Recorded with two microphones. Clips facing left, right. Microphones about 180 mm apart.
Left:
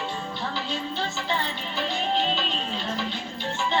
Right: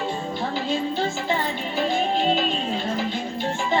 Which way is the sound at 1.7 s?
45° right (ahead or behind).